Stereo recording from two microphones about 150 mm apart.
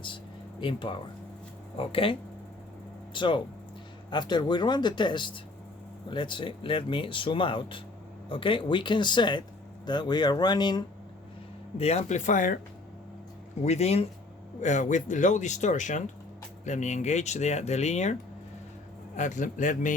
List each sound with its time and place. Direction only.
0.6 s speech: 35° left (ahead or behind)
11.8 s speech: 45° left (ahead or behind); by 12.5 s 60° left (ahead or behind)
13.6 s a man's voice: 45° left (ahead or behind)